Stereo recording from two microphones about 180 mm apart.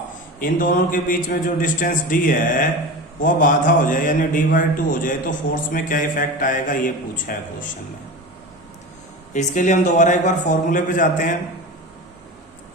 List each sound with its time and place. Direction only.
0.3 s a man's voice: 50° left (ahead or behind)
9.3 s a man's voice: 45° left (ahead or behind)